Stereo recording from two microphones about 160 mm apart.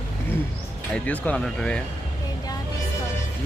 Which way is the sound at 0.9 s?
10° left (ahead or behind).